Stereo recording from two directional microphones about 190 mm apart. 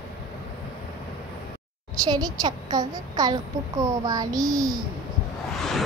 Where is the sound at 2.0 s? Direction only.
20° right (ahead or behind).